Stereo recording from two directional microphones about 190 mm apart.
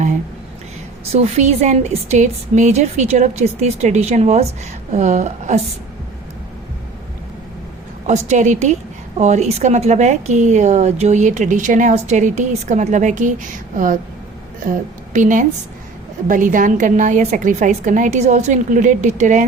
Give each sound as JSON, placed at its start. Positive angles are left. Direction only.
{"t": 1.1, "sound": "a woman's voice", "side_deg": -35}
{"t": 8.0, "sound": "a woman's voice", "side_deg": -35}